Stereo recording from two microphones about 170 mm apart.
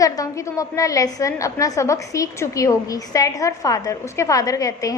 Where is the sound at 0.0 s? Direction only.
20° left (ahead or behind).